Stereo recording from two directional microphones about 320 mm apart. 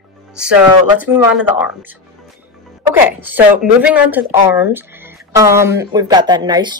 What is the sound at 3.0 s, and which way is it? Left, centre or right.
Speech, centre.